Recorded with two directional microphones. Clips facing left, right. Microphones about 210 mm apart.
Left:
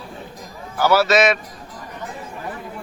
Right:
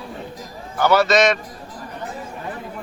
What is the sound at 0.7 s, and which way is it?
Speech, 5° left (ahead or behind).